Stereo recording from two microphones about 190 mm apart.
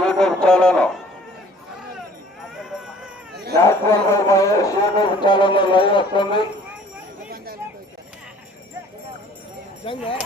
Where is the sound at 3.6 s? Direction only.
15° left (ahead or behind).